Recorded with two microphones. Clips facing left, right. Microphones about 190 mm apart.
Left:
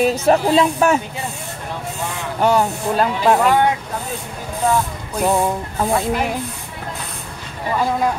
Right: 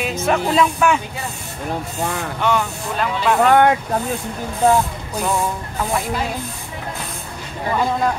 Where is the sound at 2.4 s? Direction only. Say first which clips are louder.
Left 5 dB; 40° left (ahead or behind).